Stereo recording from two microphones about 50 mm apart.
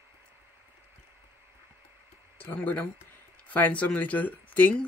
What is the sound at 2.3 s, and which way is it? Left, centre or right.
Speech, left.